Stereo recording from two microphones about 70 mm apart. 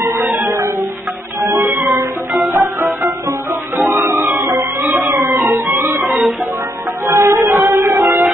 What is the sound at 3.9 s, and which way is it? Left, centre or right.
Music, right.